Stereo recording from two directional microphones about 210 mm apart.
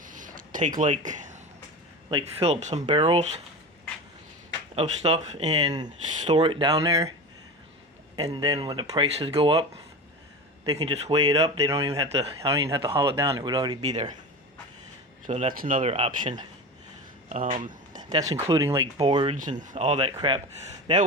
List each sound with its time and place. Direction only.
0.0 s a sound: 40° right (ahead or behind)
0.8 s speech: 35° right (ahead or behind)
4.7 s speech: 30° right (ahead or behind)
5.7 s speech: 20° right (ahead or behind)
8.1 s speech: 20° right (ahead or behind)
10.7 s speech: 20° right (ahead or behind)
12.6 s speech: 15° right (ahead or behind)
13.8 s speech: 30° right (ahead or behind)
15.3 s speech: 35° right (ahead or behind)
15.8 s speech: 30° right (ahead or behind)
17.2 s speech: 35° right (ahead or behind)
17.6 s speech: 20° right (ahead or behind)
19.0 s speech: 25° right (ahead or behind)
19.4 s speech: 35° right (ahead or behind)